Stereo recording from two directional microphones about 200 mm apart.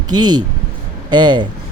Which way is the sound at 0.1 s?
20° right (ahead or behind).